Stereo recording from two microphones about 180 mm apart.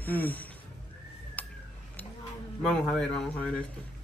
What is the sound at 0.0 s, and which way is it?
Speech, 10° left (ahead or behind).